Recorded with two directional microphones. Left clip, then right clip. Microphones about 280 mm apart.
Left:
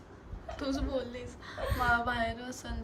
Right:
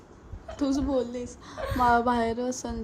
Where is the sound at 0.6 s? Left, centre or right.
Centre.